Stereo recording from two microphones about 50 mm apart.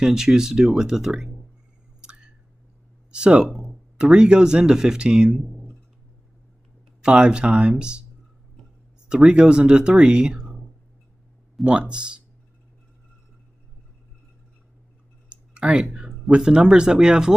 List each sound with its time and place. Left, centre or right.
0.0 s speech: centre
2.0 s chewing: centre
3.1 s speech: centre
3.6 s a sound: centre
4.6 s speech: centre
7.0 s speech: centre
9.1 s speech: centre
10.4 s a sound: centre
11.6 s speech: right
15.2 s clicking: right
16.3 s speech: centre